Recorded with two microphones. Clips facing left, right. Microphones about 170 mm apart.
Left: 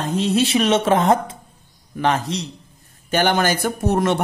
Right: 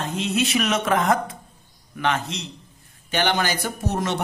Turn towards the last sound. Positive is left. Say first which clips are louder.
# left 6 dB
turn(degrees=55)  # may be behind; listen again after turning